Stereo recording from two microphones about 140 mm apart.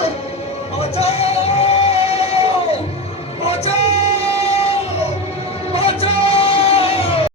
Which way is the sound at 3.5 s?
45° left (ahead or behind).